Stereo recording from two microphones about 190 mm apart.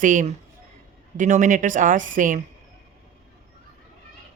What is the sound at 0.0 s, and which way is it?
A woman's voice, 40° right (ahead or behind).